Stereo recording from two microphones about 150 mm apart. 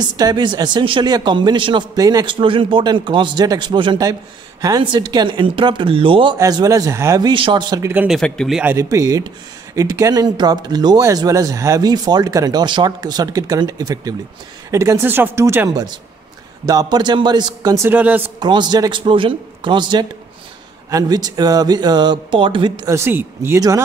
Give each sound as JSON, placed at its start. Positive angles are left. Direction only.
{"t": 0.0, "sound": "speech", "side_deg": -25}
{"t": 6.3, "sound": "speech", "side_deg": -25}
{"t": 7.9, "sound": "speech", "side_deg": -10}
{"t": 8.2, "sound": "speech", "side_deg": 0}
{"t": 8.6, "sound": "speech", "side_deg": -20}
{"t": 18.4, "sound": "speech", "side_deg": -30}
{"t": 22.8, "sound": "speech", "side_deg": -15}